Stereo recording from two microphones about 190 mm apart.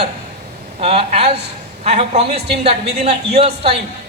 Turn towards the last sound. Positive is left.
turn(degrees=-30)  # may be behind; listen again after turning